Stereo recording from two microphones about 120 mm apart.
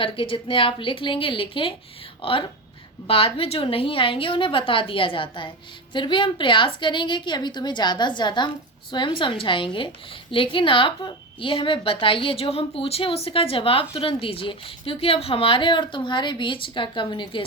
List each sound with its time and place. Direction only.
0.0 s a woman's voice: 50° left (ahead or behind)